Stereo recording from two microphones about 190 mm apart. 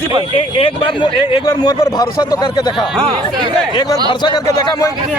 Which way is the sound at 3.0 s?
25° right (ahead or behind).